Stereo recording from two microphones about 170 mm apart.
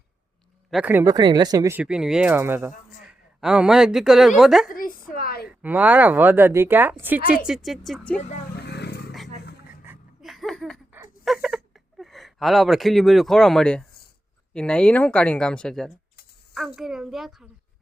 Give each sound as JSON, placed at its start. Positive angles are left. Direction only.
{"t": 0.7, "sound": "speech", "side_deg": -10}
{"t": 1.0, "sound": "speech", "side_deg": -25}
{"t": 1.8, "sound": "a woman's voice", "side_deg": -5}
{"t": 4.7, "sound": "speech", "side_deg": 55}
{"t": 5.5, "sound": "a woman's voice", "side_deg": -10}
{"t": 8.5, "sound": "vehicle", "side_deg": 80}
{"t": 10.2, "sound": "a sound", "side_deg": 0}
{"t": 14.5, "sound": "a woman's voice", "side_deg": 5}